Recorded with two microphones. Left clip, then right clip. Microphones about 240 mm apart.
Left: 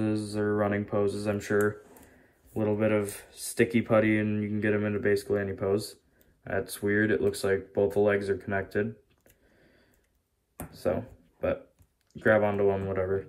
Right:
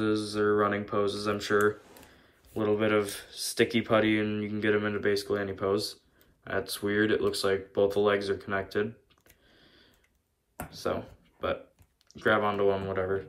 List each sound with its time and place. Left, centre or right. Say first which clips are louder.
0.1 s speech: right 3 dB; centre
2.7 s speech: right 1 dB; centre
10.7 s speech: left 3 dB; centre
12.1 s a sound: even; centre
12.4 s speech: even; centre